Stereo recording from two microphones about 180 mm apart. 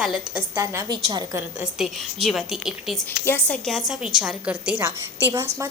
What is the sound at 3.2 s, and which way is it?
Speech, 10° left (ahead or behind).